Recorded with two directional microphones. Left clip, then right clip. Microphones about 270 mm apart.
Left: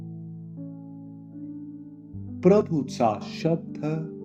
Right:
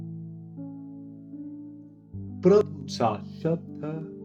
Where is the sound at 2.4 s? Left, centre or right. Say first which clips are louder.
Even; left.